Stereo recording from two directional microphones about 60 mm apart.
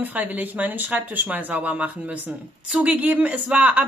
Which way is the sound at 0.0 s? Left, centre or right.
Right.